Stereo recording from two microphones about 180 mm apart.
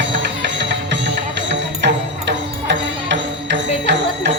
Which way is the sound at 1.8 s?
75° right (ahead or behind).